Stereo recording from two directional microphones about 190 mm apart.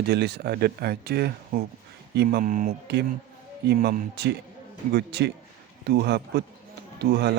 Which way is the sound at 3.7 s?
55° right (ahead or behind).